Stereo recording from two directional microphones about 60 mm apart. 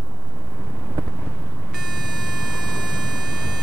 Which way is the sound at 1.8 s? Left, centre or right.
Centre.